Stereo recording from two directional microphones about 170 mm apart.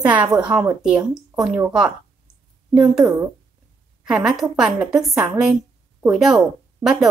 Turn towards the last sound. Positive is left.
turn(degrees=-5)  # may be behind; listen again after turning